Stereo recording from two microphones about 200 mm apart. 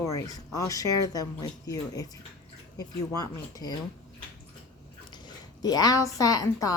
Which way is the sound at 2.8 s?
20° left (ahead or behind).